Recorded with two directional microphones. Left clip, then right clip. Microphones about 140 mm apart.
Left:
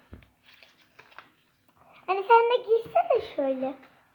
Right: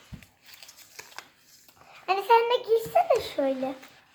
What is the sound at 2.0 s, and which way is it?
A child's voice, 5° left (ahead or behind).